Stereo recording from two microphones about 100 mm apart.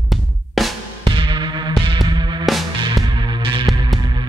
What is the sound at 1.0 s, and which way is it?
Music, 55° right (ahead or behind).